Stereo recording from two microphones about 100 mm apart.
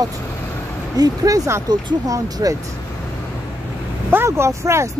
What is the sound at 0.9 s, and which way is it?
Speech, 35° right (ahead or behind).